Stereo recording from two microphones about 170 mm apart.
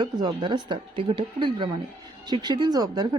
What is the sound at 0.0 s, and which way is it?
A woman's voice, 25° right (ahead or behind).